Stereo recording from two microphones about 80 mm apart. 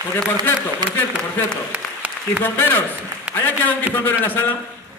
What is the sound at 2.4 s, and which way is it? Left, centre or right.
A man's voice, left.